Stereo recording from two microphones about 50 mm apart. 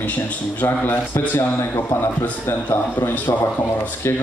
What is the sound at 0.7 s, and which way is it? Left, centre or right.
Speech, left.